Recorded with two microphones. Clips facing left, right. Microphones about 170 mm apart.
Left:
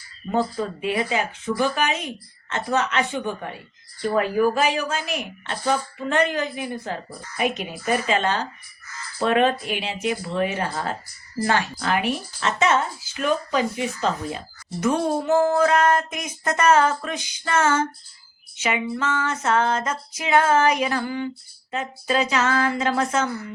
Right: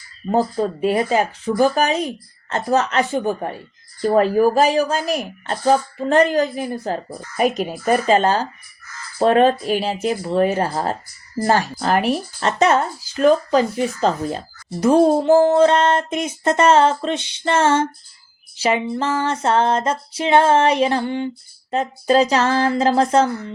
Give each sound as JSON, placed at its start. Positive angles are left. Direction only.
{"t": 0.3, "sound": "speech", "side_deg": -40}